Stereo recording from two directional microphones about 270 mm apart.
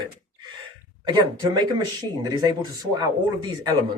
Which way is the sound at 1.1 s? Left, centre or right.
Centre.